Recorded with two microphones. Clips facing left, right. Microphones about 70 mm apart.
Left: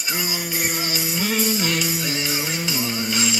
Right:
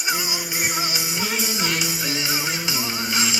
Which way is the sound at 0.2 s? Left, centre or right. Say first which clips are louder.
Left 1 dB; left.